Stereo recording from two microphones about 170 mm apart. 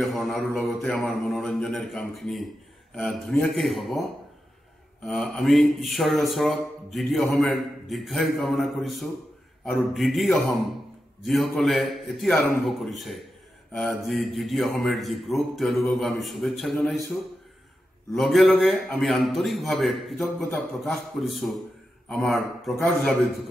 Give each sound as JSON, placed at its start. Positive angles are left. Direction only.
{"t": 0.0, "sound": "a man's voice", "side_deg": 0}
{"t": 5.0, "sound": "a man's voice", "side_deg": 5}
{"t": 18.1, "sound": "a man's voice", "side_deg": 0}
{"t": 22.1, "sound": "a man's voice", "side_deg": 10}